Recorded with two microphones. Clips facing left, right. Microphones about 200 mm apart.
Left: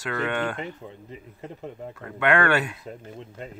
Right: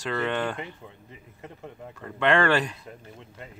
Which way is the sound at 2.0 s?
5° left (ahead or behind).